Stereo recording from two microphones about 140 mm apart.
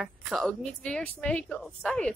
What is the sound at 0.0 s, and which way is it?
A woman's voice, centre (ahead or behind).